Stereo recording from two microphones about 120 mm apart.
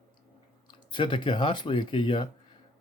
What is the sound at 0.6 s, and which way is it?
Speech, 40° left (ahead or behind).